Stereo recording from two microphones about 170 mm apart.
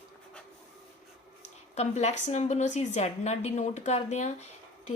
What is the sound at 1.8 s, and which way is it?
A woman's voice, 40° left (ahead or behind).